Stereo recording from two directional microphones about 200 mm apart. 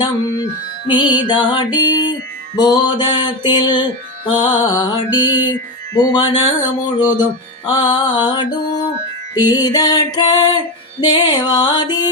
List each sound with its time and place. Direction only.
0.9 s music: 25° left (ahead or behind)